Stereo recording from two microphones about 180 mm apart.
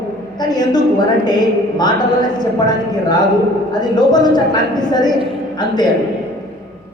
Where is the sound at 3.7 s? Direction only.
20° left (ahead or behind).